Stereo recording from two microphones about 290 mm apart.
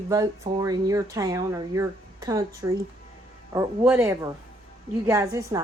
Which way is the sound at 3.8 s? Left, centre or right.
Centre.